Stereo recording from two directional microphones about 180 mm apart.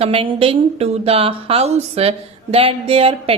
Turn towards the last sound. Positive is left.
turn(degrees=-35)  # may be behind; listen again after turning